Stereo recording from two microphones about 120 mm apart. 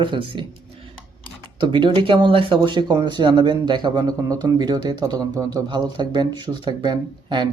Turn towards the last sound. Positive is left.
turn(degrees=-35)  # may be behind; listen again after turning